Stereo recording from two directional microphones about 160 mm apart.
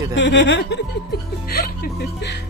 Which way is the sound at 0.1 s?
90° left.